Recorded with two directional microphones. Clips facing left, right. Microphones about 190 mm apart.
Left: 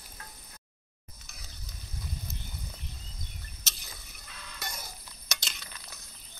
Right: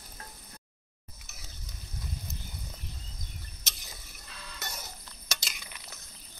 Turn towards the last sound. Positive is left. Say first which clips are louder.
# even
turn(degrees=-10)  # may be behind; listen again after turning